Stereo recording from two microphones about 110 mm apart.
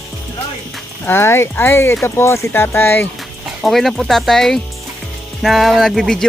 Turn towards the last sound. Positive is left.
turn(degrees=5)  # may be behind; listen again after turning